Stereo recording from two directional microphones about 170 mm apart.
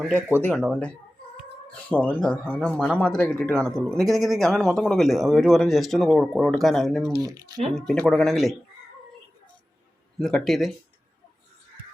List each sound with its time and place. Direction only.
0.2 s speech: 10° right (ahead or behind)
0.4 s a man's voice: 5° left (ahead or behind)
7.2 s speech: 20° right (ahead or behind)
7.7 s a man's voice: 5° left (ahead or behind)
10.2 s a man's voice: centre (ahead or behind)